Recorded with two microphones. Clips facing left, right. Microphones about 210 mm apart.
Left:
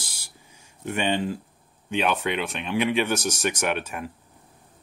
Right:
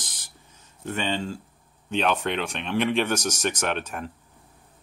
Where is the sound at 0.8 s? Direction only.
15° left (ahead or behind).